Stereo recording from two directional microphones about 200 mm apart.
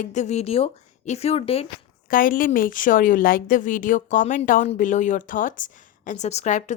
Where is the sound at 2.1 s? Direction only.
45° left (ahead or behind).